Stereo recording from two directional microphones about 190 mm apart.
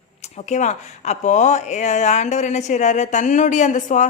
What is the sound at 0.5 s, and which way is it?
Speech, 35° left (ahead or behind).